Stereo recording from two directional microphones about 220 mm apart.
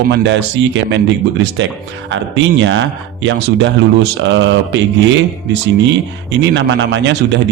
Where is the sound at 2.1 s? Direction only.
55° right (ahead or behind).